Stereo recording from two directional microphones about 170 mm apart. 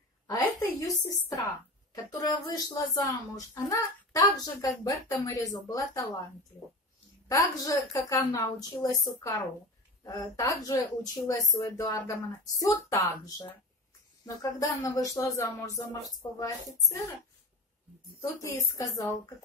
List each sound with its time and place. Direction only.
0.6 s speech: 20° left (ahead or behind)
7.2 s speech: 20° left (ahead or behind)
18.4 s speech: 20° left (ahead or behind)